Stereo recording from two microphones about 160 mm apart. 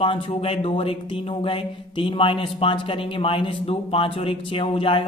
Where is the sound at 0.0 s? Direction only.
35° left (ahead or behind).